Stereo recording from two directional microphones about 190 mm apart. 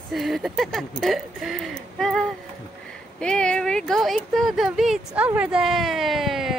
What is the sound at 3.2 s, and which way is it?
Speech, 5° left (ahead or behind).